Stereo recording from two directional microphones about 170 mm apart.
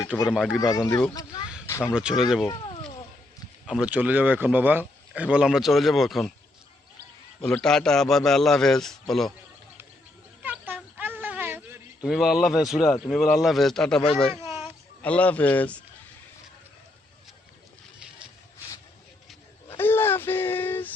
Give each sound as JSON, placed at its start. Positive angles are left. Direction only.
{"t": 0.3, "sound": "a man's voice", "side_deg": -5}
{"t": 0.6, "sound": "speech", "side_deg": 20}
{"t": 0.9, "sound": "a man's voice", "side_deg": 10}
{"t": 1.9, "sound": "a man's voice", "side_deg": -5}
{"t": 3.7, "sound": "a man's voice", "side_deg": -5}
{"t": 7.4, "sound": "a man's voice", "side_deg": 5}
{"t": 10.4, "sound": "a sound", "side_deg": -10}
{"t": 12.0, "sound": "a man's voice", "side_deg": 0}
{"t": 19.7, "sound": "a sound", "side_deg": 10}